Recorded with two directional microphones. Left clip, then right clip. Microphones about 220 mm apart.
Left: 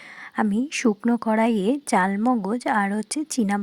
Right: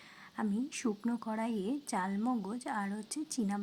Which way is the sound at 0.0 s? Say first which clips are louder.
Left 14 dB; 35° left (ahead or behind).